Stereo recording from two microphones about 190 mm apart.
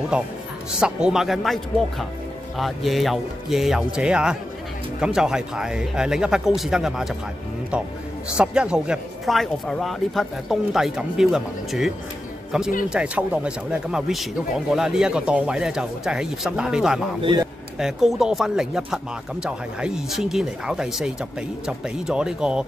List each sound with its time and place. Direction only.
0.1 s speech: 5° right (ahead or behind)
8.4 s speech: 5° right (ahead or behind)
17.2 s a man's voice: 25° right (ahead or behind)
17.7 s speech: centre (ahead or behind)